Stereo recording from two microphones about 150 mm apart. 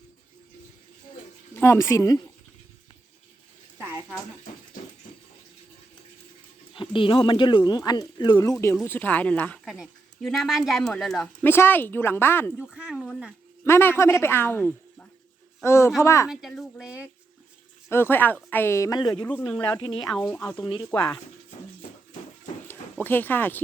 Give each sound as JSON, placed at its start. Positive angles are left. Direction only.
{"t": 1.5, "sound": "speech", "side_deg": 15}
{"t": 6.7, "sound": "speech", "side_deg": 35}
{"t": 8.6, "sound": "speech", "side_deg": 15}
{"t": 9.6, "sound": "speech", "side_deg": 0}
{"t": 11.4, "sound": "speech", "side_deg": 15}
{"t": 12.6, "sound": "speech", "side_deg": -5}
{"t": 13.7, "sound": "speech", "side_deg": 15}
{"t": 16.3, "sound": "speech", "side_deg": 0}
{"t": 17.8, "sound": "speech", "side_deg": 15}
{"t": 19.2, "sound": "speech", "side_deg": 10}
{"t": 19.7, "sound": "speech", "side_deg": 30}
{"t": 20.3, "sound": "speech", "side_deg": 10}
{"t": 20.7, "sound": "speech", "side_deg": 30}
{"t": 22.6, "sound": "dog", "side_deg": 15}